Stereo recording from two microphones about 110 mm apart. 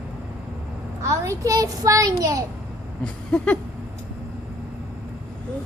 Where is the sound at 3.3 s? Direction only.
10° left (ahead or behind).